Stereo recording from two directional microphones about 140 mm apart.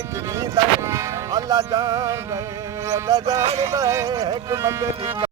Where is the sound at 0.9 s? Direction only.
25° right (ahead or behind).